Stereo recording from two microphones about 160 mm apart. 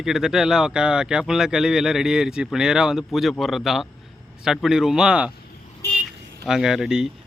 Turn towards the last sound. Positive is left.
turn(degrees=0)  # may be behind; listen again after turning